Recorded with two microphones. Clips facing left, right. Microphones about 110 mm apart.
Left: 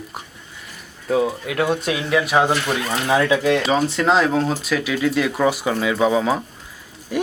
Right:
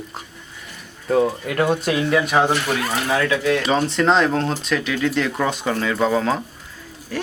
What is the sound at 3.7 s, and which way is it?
Speech, 5° left (ahead or behind).